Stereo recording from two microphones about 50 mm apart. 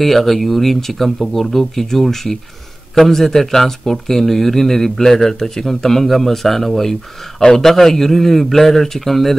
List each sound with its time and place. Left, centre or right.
0.0 s a man's voice: centre